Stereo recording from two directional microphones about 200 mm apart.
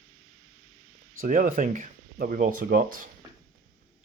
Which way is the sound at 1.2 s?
40° right (ahead or behind).